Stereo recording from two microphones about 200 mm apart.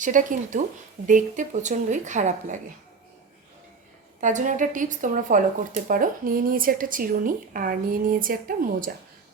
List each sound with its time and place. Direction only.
0.0 s speech: 40° right (ahead or behind)
4.2 s speech: 40° right (ahead or behind)